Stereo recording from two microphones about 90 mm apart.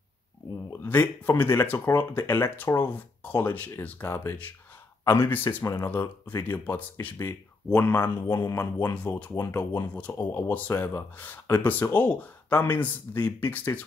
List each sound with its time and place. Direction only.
0.7 s speech: 25° left (ahead or behind)
8.9 s speech: 20° left (ahead or behind)